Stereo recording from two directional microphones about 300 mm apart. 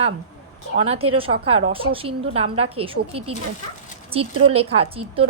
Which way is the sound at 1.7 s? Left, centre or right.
Centre.